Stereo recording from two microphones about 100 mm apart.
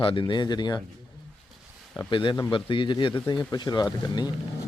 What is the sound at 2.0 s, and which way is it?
A man's voice, 55° left (ahead or behind).